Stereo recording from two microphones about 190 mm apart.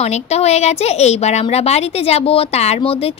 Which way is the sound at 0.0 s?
35° left (ahead or behind).